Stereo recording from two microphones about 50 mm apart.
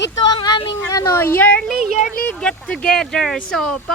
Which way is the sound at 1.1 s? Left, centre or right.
Left.